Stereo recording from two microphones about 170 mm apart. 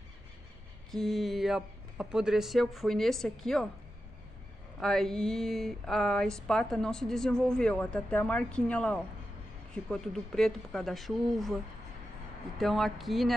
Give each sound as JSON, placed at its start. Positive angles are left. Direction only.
{"t": 0.9, "sound": "speech", "side_deg": 0}
{"t": 4.7, "sound": "speech", "side_deg": 0}
{"t": 12.5, "sound": "speech", "side_deg": 0}